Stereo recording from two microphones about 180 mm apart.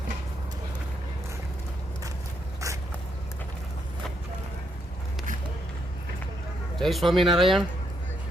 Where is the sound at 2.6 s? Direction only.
15° right (ahead or behind).